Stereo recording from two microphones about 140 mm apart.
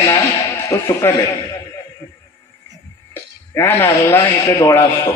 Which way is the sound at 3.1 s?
15° left (ahead or behind).